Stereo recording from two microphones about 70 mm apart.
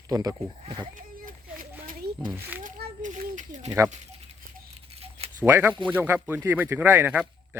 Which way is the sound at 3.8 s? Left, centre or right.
Right.